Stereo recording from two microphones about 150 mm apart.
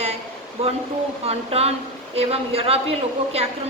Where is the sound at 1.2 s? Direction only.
40° right (ahead or behind).